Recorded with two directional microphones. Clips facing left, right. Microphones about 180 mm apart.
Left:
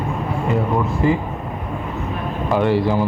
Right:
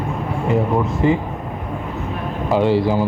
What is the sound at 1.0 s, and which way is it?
Speech, 25° right (ahead or behind).